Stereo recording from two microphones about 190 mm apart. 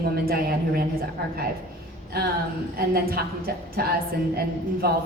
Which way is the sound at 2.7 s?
55° right (ahead or behind).